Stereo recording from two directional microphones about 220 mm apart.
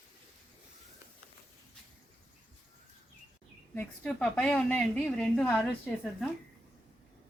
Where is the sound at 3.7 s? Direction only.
5° left (ahead or behind).